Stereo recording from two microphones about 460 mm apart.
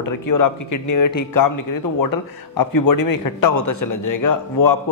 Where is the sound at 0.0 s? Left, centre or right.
Left.